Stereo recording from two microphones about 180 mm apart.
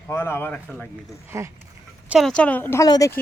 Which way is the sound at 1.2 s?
15° right (ahead or behind).